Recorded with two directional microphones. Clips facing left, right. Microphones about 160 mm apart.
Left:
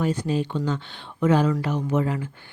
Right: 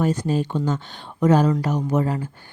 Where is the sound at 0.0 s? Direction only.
45° right (ahead or behind).